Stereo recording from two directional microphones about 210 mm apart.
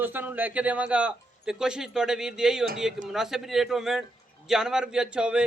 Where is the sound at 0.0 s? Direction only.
10° right (ahead or behind).